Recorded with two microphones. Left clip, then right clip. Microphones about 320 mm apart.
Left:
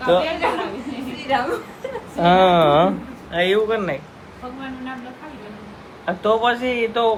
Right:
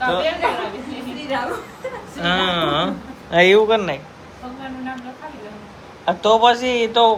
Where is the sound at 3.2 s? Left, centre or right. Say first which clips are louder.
Right 6 dB; right.